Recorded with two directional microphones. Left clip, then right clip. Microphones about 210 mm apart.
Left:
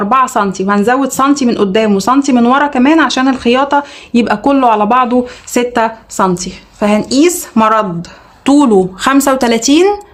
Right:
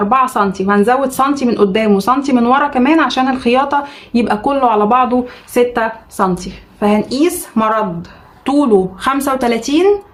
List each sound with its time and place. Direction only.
0.1 s a woman's voice: 35° left (ahead or behind); by 9.9 s 55° left (ahead or behind)